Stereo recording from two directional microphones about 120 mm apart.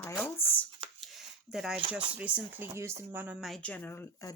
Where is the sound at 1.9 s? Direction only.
10° right (ahead or behind).